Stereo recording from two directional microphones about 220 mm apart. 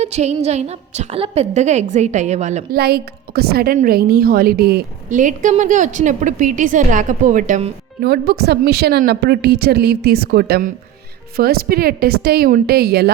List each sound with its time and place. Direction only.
0.0 s a woman's voice: 30° right (ahead or behind)
2.7 s a woman's voice: 45° right (ahead or behind)